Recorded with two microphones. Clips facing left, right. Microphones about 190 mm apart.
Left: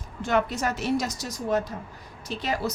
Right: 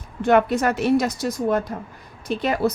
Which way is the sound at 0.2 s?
60° right (ahead or behind).